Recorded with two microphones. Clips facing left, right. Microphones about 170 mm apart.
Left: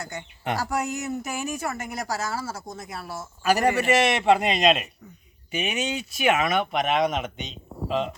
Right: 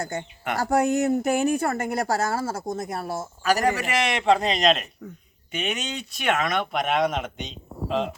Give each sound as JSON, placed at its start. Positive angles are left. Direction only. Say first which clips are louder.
{"t": 0.0, "sound": "a woman's voice", "louder": "right 3 dB", "side_deg": -50}
{"t": 3.4, "sound": "speech", "louder": "left 2 dB", "side_deg": 10}